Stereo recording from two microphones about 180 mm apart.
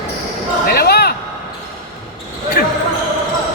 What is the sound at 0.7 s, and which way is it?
Basketball bounce, 60° left (ahead or behind).